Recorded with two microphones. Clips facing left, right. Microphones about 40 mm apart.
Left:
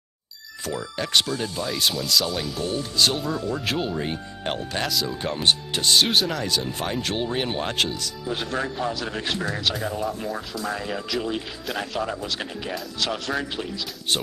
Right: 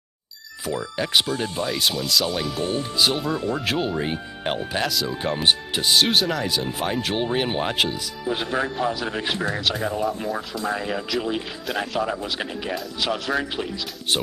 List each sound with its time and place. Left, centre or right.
0.7 s speech: centre
1.2 s speech: right
1.7 s speech: centre
2.6 s speech: right
3.0 s speech: centre
3.3 s speech: right
3.6 s speech: centre
10.5 s speech: centre